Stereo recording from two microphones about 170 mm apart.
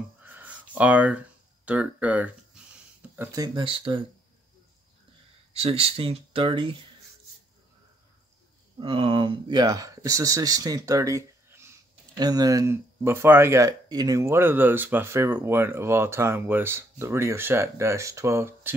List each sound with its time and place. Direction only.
0.2 s a sound: 10° right (ahead or behind)
1.7 s speech: 10° right (ahead or behind)
3.2 s speech: 20° right (ahead or behind)
5.5 s speech: 35° right (ahead or behind)
8.7 s speech: 30° right (ahead or behind); by 18.8 s 15° right (ahead or behind)